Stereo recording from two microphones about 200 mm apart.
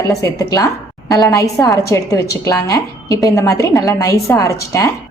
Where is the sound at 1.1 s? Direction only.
15° left (ahead or behind).